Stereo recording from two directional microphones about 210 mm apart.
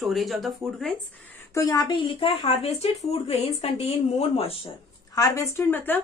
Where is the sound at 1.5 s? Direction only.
15° left (ahead or behind).